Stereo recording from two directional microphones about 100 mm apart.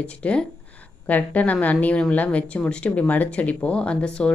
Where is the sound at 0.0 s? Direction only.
10° left (ahead or behind).